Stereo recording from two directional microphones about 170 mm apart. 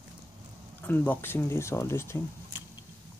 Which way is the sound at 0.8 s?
10° left (ahead or behind).